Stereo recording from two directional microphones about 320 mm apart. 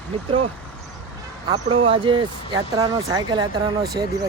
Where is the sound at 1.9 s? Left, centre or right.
Centre.